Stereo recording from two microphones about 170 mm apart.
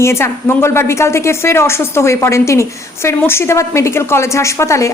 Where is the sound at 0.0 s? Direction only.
15° left (ahead or behind).